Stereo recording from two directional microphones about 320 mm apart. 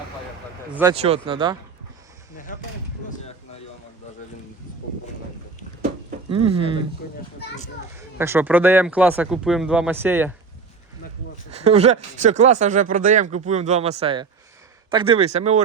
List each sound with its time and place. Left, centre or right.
0.7 s speech: centre
0.9 s speech: centre
5.8 s a sound: centre
7.0 s a child's voice: left
7.9 s speech: centre
11.5 s speech: centre